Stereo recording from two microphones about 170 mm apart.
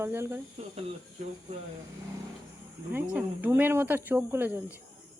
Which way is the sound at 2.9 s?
10° right (ahead or behind).